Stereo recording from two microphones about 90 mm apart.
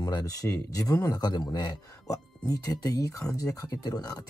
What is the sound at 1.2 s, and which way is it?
Speech, 50° left (ahead or behind).